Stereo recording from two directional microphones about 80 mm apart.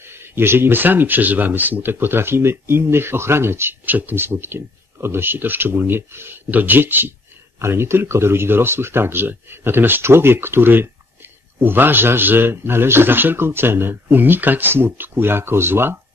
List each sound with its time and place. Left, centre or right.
0.2 s speech: right